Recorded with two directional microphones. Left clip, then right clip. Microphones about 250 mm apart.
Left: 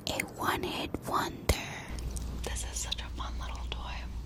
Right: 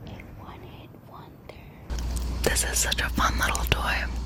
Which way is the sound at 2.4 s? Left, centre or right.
Right.